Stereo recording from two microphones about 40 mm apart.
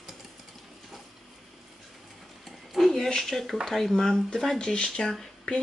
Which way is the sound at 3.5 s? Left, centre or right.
Centre.